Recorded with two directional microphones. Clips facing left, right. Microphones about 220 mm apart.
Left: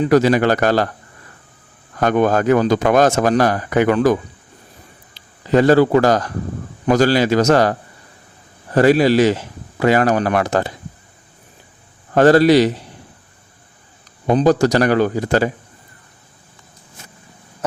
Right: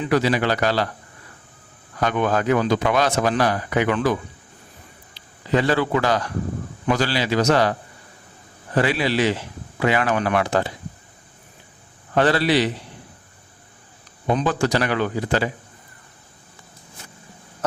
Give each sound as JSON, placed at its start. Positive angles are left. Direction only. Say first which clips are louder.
{"t": 0.0, "sound": "speech", "louder": "left 7 dB", "side_deg": 45}
{"t": 2.0, "sound": "speech", "louder": "left 6 dB", "side_deg": 45}
{"t": 5.5, "sound": "speech", "louder": "left 8 dB", "side_deg": 45}
{"t": 12.1, "sound": "speech", "louder": "left 8 dB", "side_deg": 45}
{"t": 14.3, "sound": "speech", "louder": "left 7 dB", "side_deg": 40}